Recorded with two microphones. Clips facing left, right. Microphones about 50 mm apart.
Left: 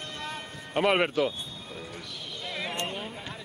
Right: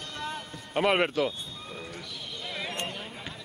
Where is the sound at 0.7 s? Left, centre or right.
Centre.